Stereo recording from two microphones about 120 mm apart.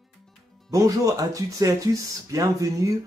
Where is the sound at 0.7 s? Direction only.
30° right (ahead or behind).